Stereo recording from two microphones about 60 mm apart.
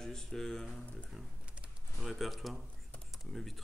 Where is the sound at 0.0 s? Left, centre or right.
Centre.